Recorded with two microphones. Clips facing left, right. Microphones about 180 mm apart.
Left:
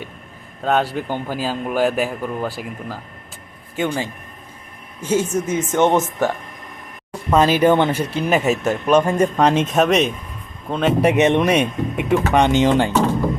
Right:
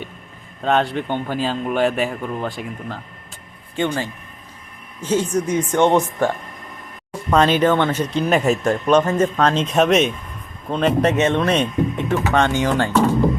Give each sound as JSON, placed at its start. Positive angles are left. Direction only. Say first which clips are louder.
{"t": 0.6, "sound": "a man's voice", "louder": "even", "side_deg": 5}
{"t": 7.3, "sound": "speech", "louder": "left 1 dB", "side_deg": 5}
{"t": 9.6, "sound": "a man's voice", "louder": "even", "side_deg": 0}
{"t": 11.1, "sound": "speech", "louder": "left 2 dB", "side_deg": 15}